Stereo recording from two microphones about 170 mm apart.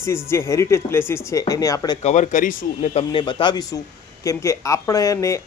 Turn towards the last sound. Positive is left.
turn(degrees=20)  # may be behind; listen again after turning